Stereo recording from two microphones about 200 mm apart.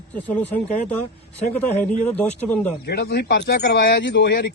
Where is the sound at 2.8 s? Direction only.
55° left (ahead or behind).